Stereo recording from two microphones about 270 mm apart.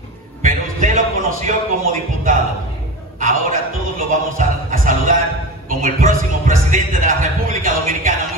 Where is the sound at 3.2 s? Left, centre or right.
Right.